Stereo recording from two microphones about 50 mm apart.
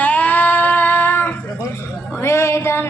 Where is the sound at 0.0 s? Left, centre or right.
Left.